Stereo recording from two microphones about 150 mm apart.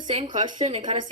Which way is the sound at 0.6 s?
50° right (ahead or behind).